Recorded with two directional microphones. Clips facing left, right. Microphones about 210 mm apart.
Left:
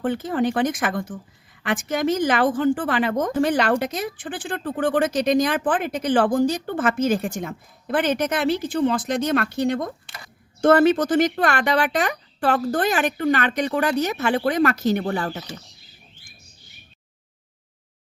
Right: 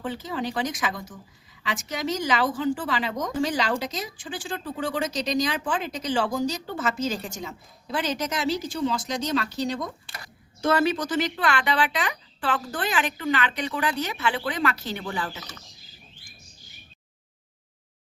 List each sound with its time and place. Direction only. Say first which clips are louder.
0.0 s a woman's voice: left 8 dB; 55° left (ahead or behind)